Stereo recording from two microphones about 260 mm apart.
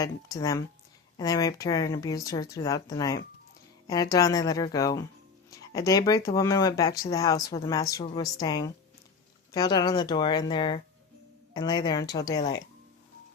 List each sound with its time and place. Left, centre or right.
0.0 s speech: centre